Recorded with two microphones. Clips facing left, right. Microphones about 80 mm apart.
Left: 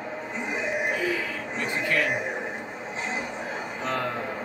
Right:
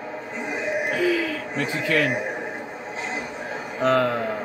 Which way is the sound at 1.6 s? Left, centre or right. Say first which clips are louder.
Right 3 dB; right.